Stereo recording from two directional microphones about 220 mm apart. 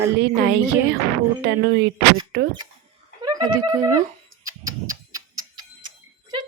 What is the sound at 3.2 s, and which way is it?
Speech, 20° right (ahead or behind).